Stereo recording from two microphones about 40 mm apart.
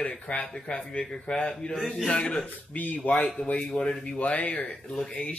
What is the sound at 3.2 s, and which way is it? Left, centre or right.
Speech, left.